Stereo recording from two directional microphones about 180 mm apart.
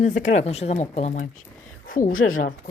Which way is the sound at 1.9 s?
50° left (ahead or behind).